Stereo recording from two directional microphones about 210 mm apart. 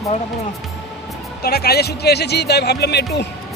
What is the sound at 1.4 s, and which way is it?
Speech, 45° left (ahead or behind).